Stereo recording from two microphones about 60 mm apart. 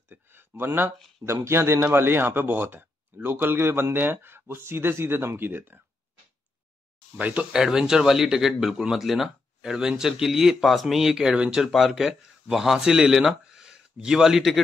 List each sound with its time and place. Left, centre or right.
0.1 s speech: right
7.2 s speech: right
7.5 s speech: centre